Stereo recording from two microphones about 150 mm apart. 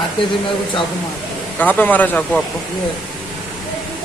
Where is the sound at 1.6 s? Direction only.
10° left (ahead or behind).